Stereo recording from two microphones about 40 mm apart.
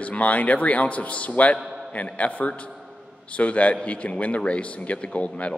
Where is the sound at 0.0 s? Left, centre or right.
Left.